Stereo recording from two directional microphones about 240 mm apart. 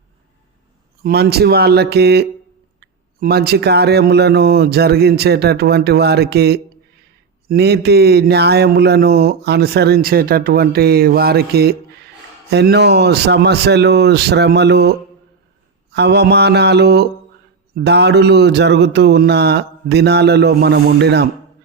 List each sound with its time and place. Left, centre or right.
1.0 s a man's voice: right